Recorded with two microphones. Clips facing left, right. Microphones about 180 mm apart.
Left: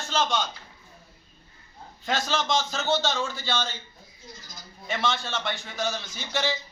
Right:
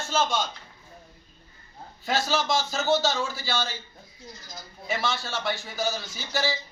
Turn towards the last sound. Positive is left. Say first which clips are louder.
# even
turn(degrees=-5)  # may be behind; listen again after turning